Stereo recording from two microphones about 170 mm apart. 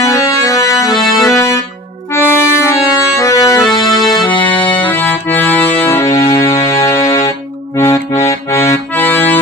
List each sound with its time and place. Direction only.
0.0 s accordion: 20° left (ahead or behind)
2.1 s music: 15° left (ahead or behind)
4.9 s accordion: 10° left (ahead or behind)
5.7 s music: 15° left (ahead or behind)
6.1 s music: 35° left (ahead or behind)
8.4 s accordion: 15° left (ahead or behind)